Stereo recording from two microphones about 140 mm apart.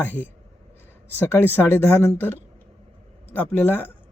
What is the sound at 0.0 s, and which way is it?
Speech, 15° left (ahead or behind).